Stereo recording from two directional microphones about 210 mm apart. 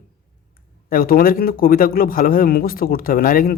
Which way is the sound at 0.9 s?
45° left (ahead or behind).